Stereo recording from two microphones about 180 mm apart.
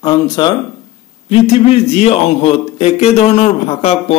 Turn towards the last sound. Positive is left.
turn(degrees=35)  # may be behind; listen again after turning